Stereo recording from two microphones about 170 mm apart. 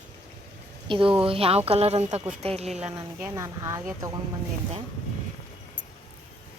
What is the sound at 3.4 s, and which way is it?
Speech, 15° right (ahead or behind).